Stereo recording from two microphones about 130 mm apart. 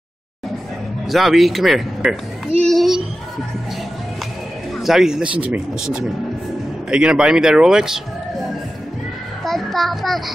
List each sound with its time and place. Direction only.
1.0 s speech: centre (ahead or behind)
2.6 s a sound: centre (ahead or behind)
4.7 s speech: centre (ahead or behind)
9.4 s child singing: centre (ahead or behind)